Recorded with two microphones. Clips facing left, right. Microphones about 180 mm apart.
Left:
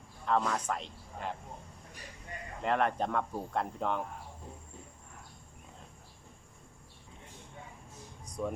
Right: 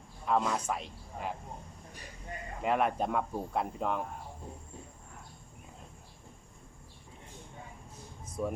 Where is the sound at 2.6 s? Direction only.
10° right (ahead or behind).